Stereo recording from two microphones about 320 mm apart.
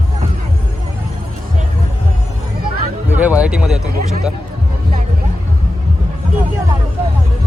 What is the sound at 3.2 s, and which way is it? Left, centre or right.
Music, centre.